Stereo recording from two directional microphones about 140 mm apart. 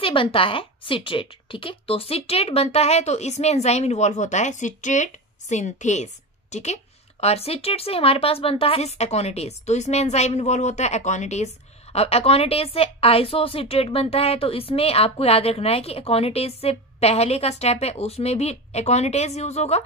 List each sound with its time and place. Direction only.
0.0 s speech: 40° left (ahead or behind)